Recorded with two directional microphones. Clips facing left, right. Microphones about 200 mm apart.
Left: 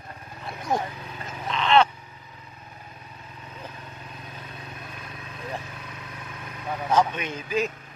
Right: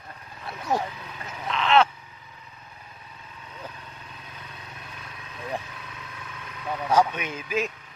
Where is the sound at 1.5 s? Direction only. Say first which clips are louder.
Left 1 dB; centre (ahead or behind).